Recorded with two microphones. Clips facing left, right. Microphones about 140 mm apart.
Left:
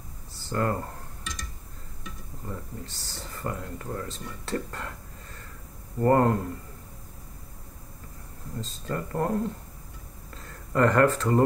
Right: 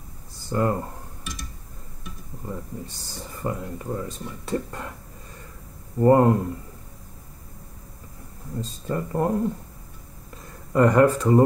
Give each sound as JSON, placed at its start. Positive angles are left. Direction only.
{"t": 0.4, "sound": "cutlery", "side_deg": -15}
{"t": 2.0, "sound": "speech", "side_deg": -15}
{"t": 8.5, "sound": "speech", "side_deg": -15}